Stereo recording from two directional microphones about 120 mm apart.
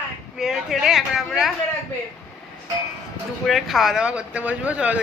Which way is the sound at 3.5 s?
Centre (ahead or behind).